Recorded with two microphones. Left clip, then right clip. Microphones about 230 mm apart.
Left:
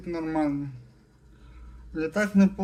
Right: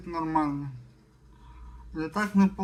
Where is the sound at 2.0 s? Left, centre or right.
Centre.